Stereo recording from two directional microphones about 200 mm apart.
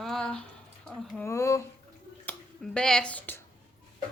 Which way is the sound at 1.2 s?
15° left (ahead or behind).